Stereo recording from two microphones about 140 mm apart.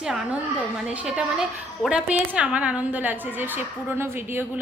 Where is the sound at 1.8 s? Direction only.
5° right (ahead or behind).